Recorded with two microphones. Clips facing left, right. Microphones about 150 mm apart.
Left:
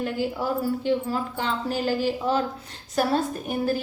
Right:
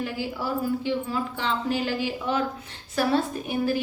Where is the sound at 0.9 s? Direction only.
45° left (ahead or behind).